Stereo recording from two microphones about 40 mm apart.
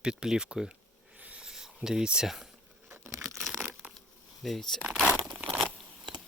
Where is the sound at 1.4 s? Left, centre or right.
Centre.